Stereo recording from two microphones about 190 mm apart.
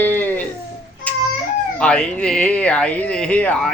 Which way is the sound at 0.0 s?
10° left (ahead or behind).